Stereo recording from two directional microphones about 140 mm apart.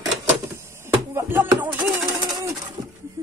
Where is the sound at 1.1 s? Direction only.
15° right (ahead or behind).